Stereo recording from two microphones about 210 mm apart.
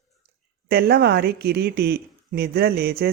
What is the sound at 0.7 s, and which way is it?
Speech, 50° right (ahead or behind).